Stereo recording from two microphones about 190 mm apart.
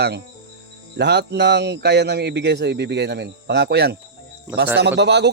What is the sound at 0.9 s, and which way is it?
Speech, 60° right (ahead or behind).